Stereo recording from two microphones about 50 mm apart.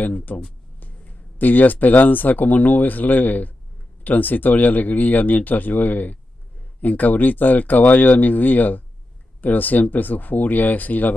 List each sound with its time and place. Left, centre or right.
0.0 s speech: left